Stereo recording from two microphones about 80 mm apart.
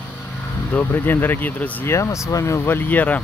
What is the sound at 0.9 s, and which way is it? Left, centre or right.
Speech, left.